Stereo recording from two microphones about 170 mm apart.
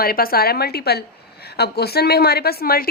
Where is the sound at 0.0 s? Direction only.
60° left (ahead or behind).